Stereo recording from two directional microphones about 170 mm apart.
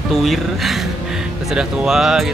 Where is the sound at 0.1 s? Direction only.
Centre (ahead or behind).